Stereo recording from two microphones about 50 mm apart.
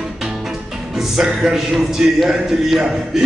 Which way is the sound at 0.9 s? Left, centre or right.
Centre.